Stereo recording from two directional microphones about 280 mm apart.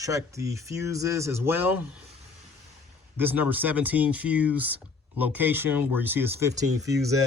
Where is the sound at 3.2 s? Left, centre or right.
Centre.